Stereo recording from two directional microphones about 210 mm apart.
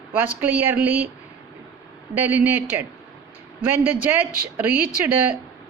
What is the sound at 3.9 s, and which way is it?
Speech, 10° right (ahead or behind).